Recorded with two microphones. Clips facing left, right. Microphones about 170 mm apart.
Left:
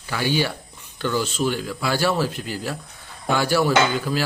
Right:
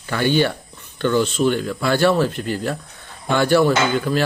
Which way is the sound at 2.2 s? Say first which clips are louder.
Right 5 dB; 55° right (ahead or behind).